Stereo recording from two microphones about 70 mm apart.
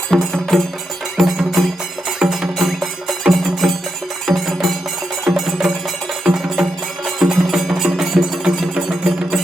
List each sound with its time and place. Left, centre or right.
0.1 s music: centre